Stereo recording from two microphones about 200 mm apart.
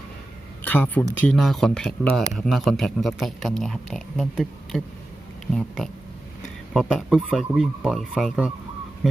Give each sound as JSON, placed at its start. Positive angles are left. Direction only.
{"t": 0.6, "sound": "speech", "side_deg": 10}